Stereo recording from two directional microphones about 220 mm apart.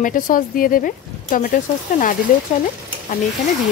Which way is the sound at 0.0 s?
40° left (ahead or behind).